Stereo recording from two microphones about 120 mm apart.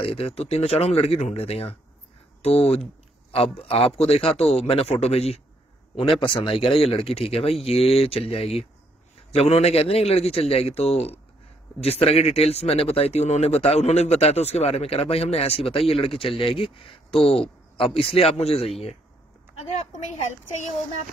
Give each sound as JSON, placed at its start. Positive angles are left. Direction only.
{"t": 0.0, "sound": "speech", "side_deg": 55}
{"t": 6.2, "sound": "speech", "side_deg": 45}